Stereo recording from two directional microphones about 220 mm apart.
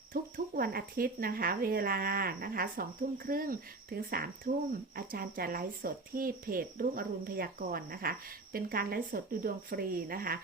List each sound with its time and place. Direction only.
0.1 s speech: 40° right (ahead or behind)